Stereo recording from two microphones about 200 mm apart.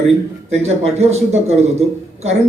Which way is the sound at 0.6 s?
35° right (ahead or behind).